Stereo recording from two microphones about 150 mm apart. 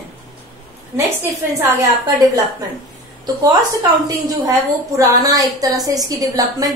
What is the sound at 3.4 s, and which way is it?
A woman's voice, 25° right (ahead or behind).